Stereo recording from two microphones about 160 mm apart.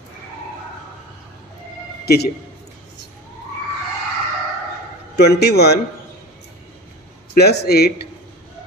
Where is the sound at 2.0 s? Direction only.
80° left.